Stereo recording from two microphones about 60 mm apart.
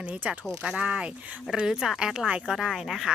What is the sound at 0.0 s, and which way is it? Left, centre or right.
A woman's voice, right.